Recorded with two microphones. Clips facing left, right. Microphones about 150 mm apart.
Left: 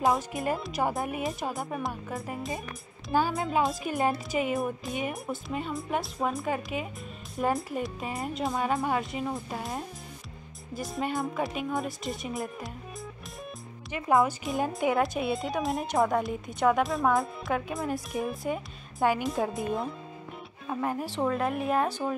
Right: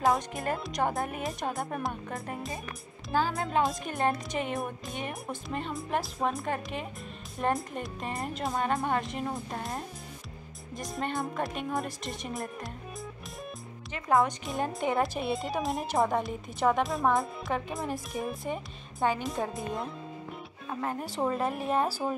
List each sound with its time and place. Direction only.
0.0 s speech: centre (ahead or behind)
3.1 s speech: 10° left (ahead or behind)
3.3 s speech: centre (ahead or behind)
14.1 s speech: centre (ahead or behind)
20.6 s speech: centre (ahead or behind)